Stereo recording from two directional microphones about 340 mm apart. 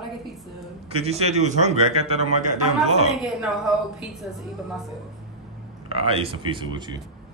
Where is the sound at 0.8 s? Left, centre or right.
Centre.